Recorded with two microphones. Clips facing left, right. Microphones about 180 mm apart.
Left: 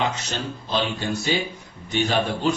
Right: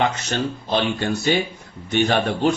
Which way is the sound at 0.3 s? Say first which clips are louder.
Right 5 dB; 60° right (ahead or behind).